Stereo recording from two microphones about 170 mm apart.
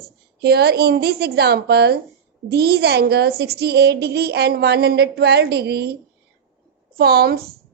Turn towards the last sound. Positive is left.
turn(degrees=-65)  # may be behind; listen again after turning